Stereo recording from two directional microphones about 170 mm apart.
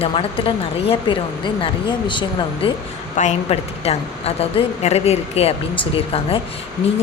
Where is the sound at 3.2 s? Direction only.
40° left (ahead or behind).